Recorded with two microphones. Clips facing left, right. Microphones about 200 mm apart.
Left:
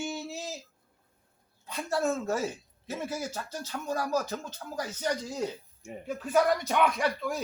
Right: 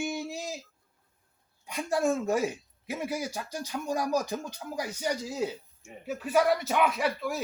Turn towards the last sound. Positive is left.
turn(degrees=-5)  # may be behind; listen again after turning